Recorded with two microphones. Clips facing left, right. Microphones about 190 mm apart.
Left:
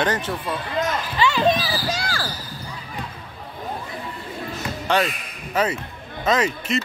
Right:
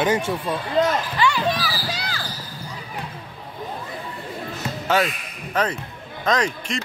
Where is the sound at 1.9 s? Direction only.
45° left (ahead or behind).